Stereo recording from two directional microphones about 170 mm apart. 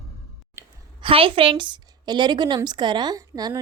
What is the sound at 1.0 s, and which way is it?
A woman's voice, 30° right (ahead or behind).